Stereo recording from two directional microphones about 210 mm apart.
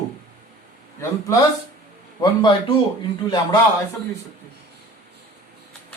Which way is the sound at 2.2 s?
20° left (ahead or behind).